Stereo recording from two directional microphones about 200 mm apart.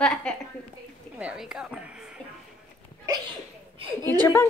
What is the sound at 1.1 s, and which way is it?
Speech, 5° right (ahead or behind).